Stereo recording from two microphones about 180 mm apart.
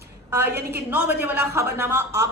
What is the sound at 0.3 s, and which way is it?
A woman's voice, 15° right (ahead or behind).